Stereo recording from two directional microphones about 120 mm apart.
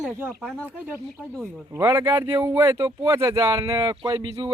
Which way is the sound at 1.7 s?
20° right (ahead or behind).